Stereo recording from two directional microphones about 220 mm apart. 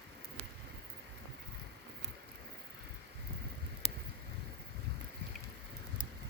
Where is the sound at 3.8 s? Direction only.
25° left (ahead or behind).